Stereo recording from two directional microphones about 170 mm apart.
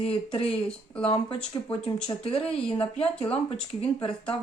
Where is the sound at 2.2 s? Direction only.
35° left (ahead or behind).